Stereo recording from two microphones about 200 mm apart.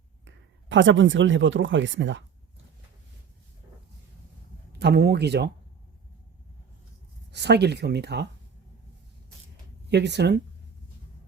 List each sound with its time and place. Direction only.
0.3 s speech: 70° right (ahead or behind)
4.8 s speech: 55° right (ahead or behind)
7.3 s speech: 55° right (ahead or behind)
9.9 s speech: 60° right (ahead or behind)